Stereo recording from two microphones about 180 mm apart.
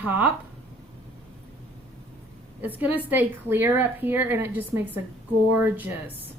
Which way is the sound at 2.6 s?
10° right (ahead or behind).